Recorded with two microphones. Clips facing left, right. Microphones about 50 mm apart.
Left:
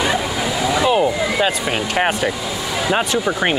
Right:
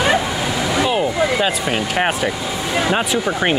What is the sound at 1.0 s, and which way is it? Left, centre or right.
Speech, centre.